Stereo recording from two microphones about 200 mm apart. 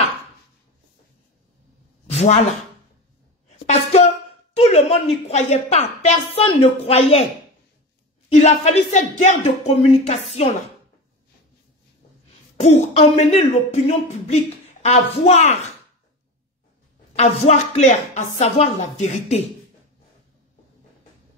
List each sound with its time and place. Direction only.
2.0 s a sound: 30° left (ahead or behind)
3.4 s a sound: 30° left (ahead or behind)
4.6 s speech: 30° left (ahead or behind)
8.3 s speech: 35° left (ahead or behind)
12.5 s speech: 35° left (ahead or behind)
17.1 s speech: 35° left (ahead or behind)